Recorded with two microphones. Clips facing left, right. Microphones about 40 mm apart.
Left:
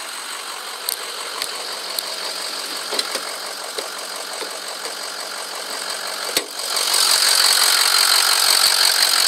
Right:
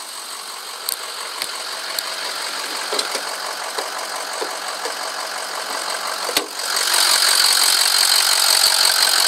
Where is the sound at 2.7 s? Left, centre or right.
Right.